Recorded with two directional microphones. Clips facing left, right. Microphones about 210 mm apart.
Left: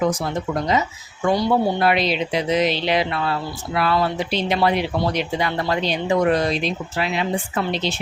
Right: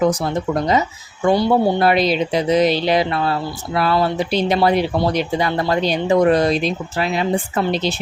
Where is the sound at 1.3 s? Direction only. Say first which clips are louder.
Right 3 dB; 30° right (ahead or behind).